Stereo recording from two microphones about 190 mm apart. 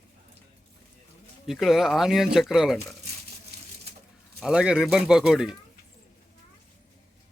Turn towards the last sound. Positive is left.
turn(degrees=-5)  # may be behind; listen again after turning